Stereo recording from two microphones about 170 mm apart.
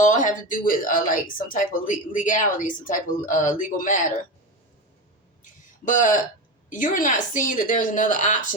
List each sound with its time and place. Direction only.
0.0 s speech: 50° left (ahead or behind)
5.4 s a sound: 50° left (ahead or behind)
6.7 s speech: 50° left (ahead or behind)